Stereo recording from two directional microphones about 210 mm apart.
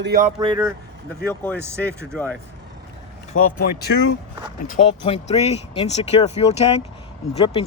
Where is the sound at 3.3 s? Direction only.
40° left (ahead or behind).